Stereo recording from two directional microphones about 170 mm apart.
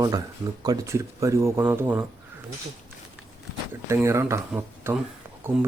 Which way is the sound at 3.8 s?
15° right (ahead or behind).